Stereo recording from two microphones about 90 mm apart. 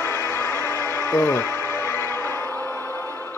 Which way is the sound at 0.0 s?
30° left (ahead or behind).